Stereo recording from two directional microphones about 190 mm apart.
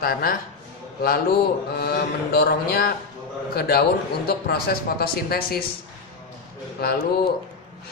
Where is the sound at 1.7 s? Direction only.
55° left (ahead or behind).